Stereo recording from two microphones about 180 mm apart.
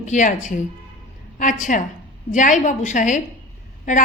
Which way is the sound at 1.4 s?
45° left (ahead or behind).